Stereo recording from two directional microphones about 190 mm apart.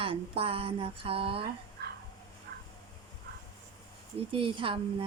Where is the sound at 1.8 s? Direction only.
60° right (ahead or behind).